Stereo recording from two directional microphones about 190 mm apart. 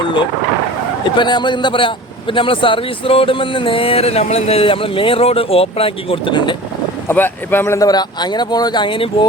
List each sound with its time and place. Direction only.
1.0 s a man's voice: 25° left (ahead or behind)
7.1 s a man's voice: 10° left (ahead or behind)